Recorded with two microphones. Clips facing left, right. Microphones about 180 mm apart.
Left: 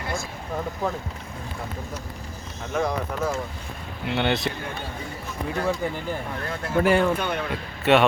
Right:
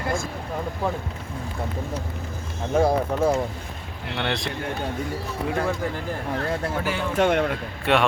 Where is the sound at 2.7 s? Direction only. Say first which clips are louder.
Right 5 dB; 30° right (ahead or behind).